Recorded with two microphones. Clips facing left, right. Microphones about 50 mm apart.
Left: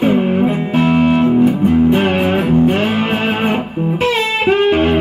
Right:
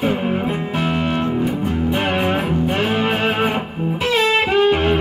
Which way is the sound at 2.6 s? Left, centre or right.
Left.